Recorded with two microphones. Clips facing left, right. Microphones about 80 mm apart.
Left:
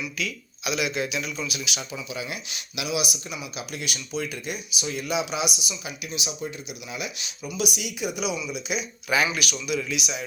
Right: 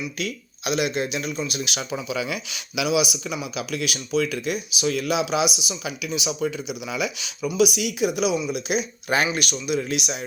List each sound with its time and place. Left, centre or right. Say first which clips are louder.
0.2 s speech: right 2 dB; right
2.0 s speech: right 6 dB; right